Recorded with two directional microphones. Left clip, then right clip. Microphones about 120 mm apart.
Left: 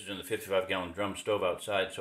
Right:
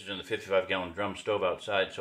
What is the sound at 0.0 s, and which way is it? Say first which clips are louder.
A man's voice: right 1 dB; 20° left (ahead or behind).